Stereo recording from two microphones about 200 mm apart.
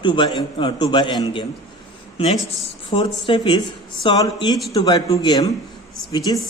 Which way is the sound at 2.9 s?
25° left (ahead or behind).